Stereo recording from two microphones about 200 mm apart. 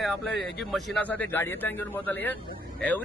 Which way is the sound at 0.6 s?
Centre (ahead or behind).